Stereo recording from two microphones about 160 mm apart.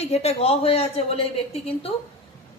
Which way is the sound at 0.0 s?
40° left (ahead or behind).